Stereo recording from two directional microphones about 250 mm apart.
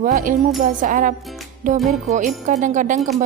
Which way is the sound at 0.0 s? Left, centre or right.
Right.